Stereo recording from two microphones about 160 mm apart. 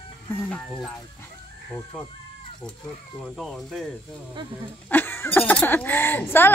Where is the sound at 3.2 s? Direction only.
5° left (ahead or behind).